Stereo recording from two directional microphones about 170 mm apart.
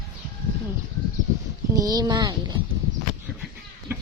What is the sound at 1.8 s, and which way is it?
Speech, 20° right (ahead or behind).